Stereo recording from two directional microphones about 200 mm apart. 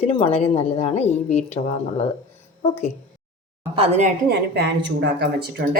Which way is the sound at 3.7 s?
30° right (ahead or behind).